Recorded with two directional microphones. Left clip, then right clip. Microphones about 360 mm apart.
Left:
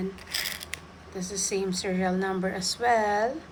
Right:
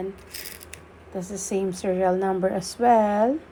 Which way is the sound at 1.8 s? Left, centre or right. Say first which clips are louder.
Right 6 dB; right.